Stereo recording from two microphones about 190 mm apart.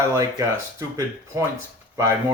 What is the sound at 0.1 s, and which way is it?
Speech, 15° right (ahead or behind).